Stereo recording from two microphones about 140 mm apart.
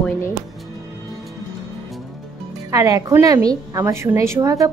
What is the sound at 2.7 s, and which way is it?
A woman's voice, 25° right (ahead or behind).